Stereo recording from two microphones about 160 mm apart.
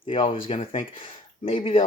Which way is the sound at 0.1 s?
35° left (ahead or behind).